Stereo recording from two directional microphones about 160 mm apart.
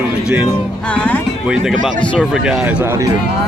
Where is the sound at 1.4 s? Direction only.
5° right (ahead or behind).